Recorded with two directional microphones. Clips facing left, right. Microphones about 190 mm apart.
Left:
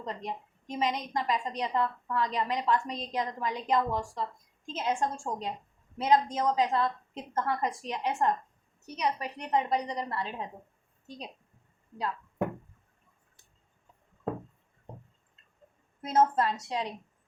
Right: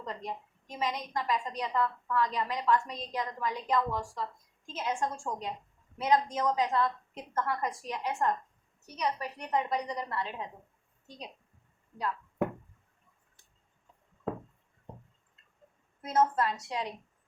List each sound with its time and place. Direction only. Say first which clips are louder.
0.0 s a woman's voice: left 2 dB; 20° left (ahead or behind)
16.0 s a woman's voice: left 2 dB; 25° left (ahead or behind)